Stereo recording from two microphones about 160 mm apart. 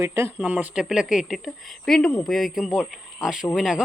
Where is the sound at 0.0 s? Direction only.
15° right (ahead or behind).